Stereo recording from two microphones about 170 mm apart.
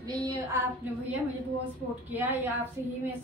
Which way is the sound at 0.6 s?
15° right (ahead or behind).